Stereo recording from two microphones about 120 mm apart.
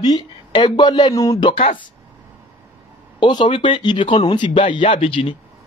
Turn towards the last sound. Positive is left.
turn(degrees=50)  # may be behind; listen again after turning